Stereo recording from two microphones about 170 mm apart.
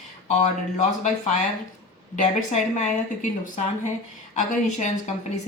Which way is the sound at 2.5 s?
45° left (ahead or behind).